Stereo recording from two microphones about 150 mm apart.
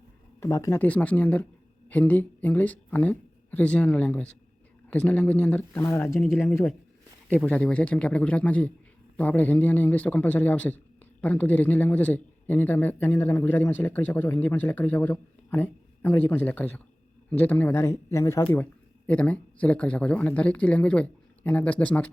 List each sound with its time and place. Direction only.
0.3 s a man's voice: 20° left (ahead or behind)